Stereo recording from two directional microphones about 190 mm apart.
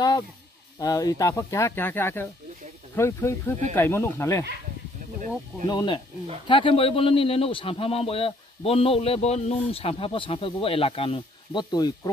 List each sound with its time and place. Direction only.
0.7 s speech: 20° left (ahead or behind)
5.7 s a man's voice: 20° left (ahead or behind)